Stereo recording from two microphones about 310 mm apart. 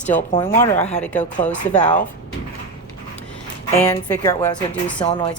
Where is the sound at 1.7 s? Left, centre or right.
Left.